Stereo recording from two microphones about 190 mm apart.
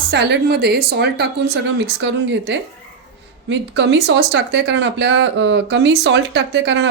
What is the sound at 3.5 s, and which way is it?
Speech, 65° right (ahead or behind).